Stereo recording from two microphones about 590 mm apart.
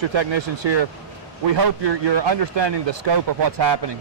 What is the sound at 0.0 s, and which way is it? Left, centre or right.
A man's voice, right.